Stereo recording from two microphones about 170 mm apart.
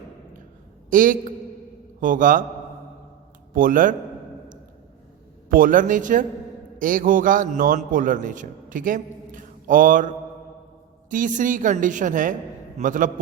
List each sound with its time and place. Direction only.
0.9 s a man's voice: 50° right (ahead or behind)
3.5 s a woman's voice: 55° right (ahead or behind)
5.5 s a woman's voice: 55° right (ahead or behind)
11.1 s a woman's voice: 50° right (ahead or behind)